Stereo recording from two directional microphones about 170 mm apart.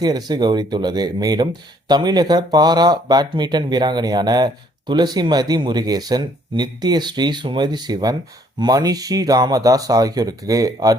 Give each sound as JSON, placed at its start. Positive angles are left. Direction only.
{"t": 0.0, "sound": "speech", "side_deg": -25}